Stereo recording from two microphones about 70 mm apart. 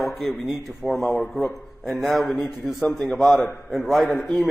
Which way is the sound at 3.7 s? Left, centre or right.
Centre.